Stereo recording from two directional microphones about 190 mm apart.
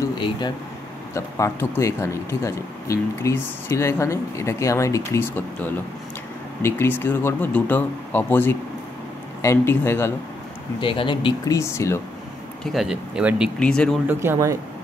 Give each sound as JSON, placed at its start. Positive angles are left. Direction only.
{"t": 0.0, "sound": "air conditioning", "side_deg": 25}
{"t": 1.1, "sound": "speech", "side_deg": 15}
{"t": 10.8, "sound": "speech", "side_deg": 25}
{"t": 12.6, "sound": "speech", "side_deg": 0}
{"t": 13.6, "sound": "speech", "side_deg": 5}
{"t": 14.0, "sound": "speech", "side_deg": -10}